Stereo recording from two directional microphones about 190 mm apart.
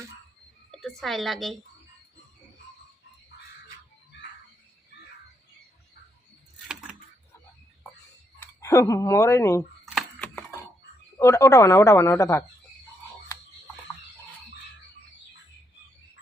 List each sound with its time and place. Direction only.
0.8 s a woman's voice: centre (ahead or behind)
8.6 s speech: 15° left (ahead or behind)
10.2 s a sound: 10° left (ahead or behind)
11.2 s speech: 15° left (ahead or behind)